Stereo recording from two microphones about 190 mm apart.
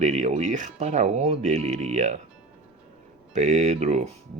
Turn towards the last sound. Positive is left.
turn(degrees=-35)  # may be behind; listen again after turning